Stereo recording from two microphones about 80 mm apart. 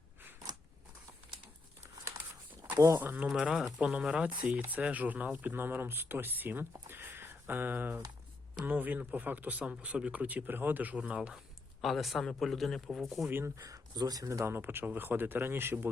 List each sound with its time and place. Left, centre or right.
2.7 s speech: right
3.0 s speech: right
3.2 s speech: centre
11.8 s speech: centre
13.6 s speech: right
14.4 s speech: right